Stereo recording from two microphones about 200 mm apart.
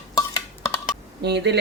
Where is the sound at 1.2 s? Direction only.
55° right (ahead or behind).